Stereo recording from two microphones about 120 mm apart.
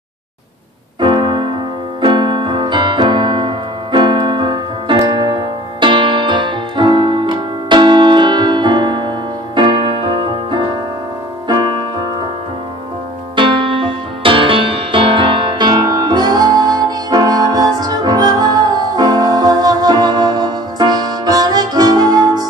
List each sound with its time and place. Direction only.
1.0 s keyboard: 40° right (ahead or behind)
2.0 s piano: 40° right (ahead or behind)
9.6 s music: 40° right (ahead or behind)
13.4 s music: 45° right (ahead or behind)